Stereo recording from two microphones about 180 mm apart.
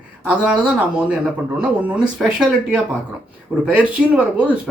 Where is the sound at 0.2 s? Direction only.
5° right (ahead or behind).